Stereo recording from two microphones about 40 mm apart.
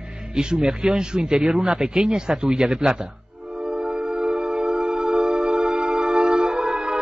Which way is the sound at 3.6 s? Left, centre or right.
Right.